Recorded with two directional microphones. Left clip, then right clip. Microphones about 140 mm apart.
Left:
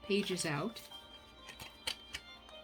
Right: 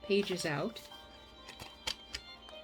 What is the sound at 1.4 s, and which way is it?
Music, 25° right (ahead or behind).